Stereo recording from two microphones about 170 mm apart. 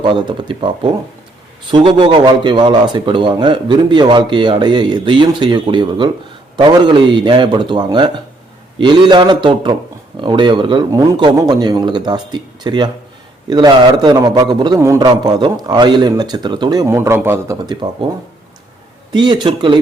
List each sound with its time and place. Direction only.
0.0 s a man's voice: 30° right (ahead or behind)
19.1 s a man's voice: 25° right (ahead or behind)